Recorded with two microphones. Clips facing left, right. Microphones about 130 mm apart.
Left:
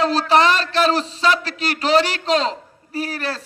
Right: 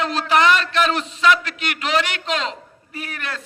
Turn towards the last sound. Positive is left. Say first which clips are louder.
# left 6 dB
turn(degrees=35)  # may be behind; listen again after turning